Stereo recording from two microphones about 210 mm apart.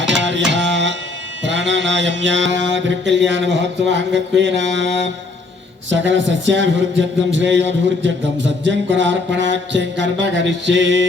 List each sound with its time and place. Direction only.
0.0 s music: 60° right (ahead or behind)
1.5 s mantra: 60° right (ahead or behind)
5.9 s mantra: 60° right (ahead or behind)